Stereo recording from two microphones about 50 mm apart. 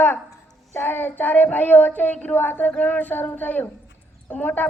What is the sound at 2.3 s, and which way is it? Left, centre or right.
A man's voice, left.